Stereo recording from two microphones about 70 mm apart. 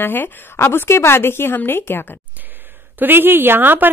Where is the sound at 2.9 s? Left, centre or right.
Right.